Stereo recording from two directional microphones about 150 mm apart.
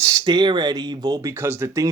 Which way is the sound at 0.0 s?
25° right (ahead or behind).